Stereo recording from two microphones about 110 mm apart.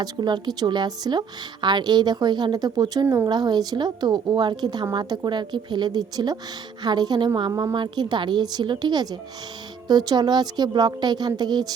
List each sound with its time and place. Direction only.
0.0 s a woman's voice: 40° right (ahead or behind)